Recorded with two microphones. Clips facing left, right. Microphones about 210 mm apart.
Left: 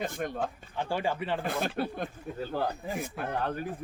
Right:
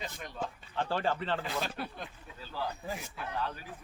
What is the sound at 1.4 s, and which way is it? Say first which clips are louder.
Speech: left 5 dB; 55° left (ahead or behind).